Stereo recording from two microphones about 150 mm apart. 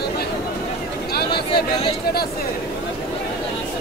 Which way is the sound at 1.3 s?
35° left (ahead or behind).